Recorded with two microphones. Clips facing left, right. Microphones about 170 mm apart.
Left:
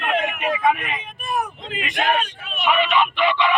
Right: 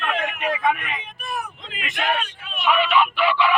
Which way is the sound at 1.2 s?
45° left (ahead or behind).